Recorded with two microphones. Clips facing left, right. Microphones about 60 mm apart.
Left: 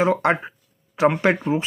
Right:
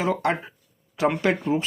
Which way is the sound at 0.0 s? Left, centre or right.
Left.